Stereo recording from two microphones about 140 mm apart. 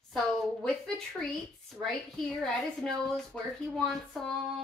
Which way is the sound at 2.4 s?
5° left (ahead or behind).